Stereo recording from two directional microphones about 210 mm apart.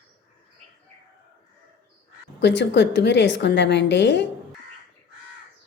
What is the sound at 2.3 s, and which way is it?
A woman's voice, 55° left (ahead or behind).